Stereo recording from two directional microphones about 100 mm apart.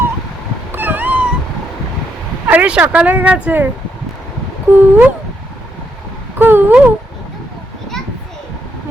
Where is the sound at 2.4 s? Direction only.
15° right (ahead or behind).